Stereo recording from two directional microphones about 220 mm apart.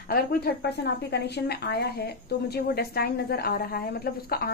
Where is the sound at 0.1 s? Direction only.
45° left (ahead or behind).